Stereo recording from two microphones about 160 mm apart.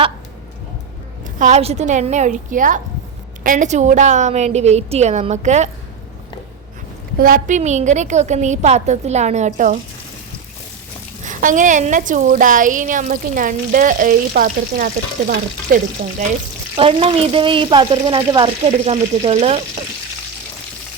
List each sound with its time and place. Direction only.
1.4 s a woman's voice: 45° right (ahead or behind)
7.2 s a woman's voice: 55° right (ahead or behind)
11.2 s a woman's voice: 55° right (ahead or behind)
16.7 s speech: 35° right (ahead or behind)